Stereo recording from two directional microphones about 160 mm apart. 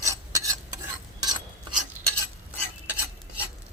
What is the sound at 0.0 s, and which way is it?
Stir, 20° right (ahead or behind).